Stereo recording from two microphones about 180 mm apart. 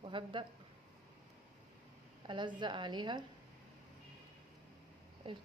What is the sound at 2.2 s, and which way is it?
A woman's voice, 25° right (ahead or behind).